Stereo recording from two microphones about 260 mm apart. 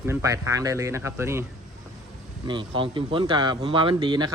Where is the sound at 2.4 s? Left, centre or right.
Centre.